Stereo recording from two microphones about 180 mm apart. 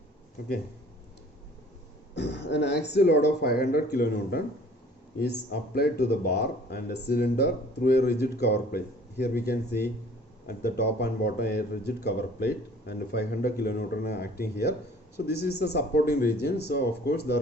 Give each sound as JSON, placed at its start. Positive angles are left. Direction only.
{"t": 2.1, "sound": "speech", "side_deg": 70}